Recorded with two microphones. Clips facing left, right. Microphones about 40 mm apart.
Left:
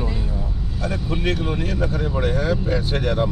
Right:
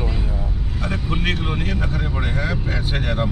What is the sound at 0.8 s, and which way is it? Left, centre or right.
Speech, right.